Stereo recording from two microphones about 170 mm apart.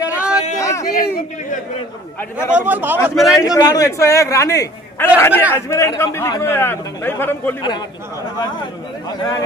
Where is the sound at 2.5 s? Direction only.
10° right (ahead or behind).